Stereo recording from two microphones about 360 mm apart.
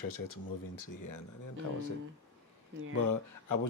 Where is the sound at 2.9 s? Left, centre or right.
Left.